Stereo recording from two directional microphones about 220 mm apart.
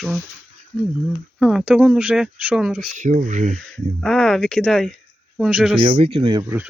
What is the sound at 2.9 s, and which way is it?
Speech, 35° right (ahead or behind).